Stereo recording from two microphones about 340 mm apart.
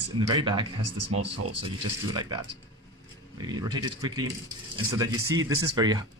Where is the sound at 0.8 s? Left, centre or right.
Right.